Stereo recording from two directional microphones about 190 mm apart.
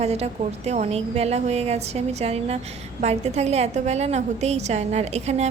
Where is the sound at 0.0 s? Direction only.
35° right (ahead or behind).